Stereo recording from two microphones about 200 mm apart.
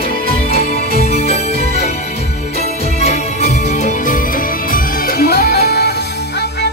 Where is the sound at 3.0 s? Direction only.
30° left (ahead or behind).